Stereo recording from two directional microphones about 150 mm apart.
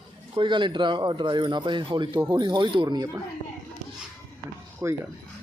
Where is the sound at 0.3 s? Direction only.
30° right (ahead or behind).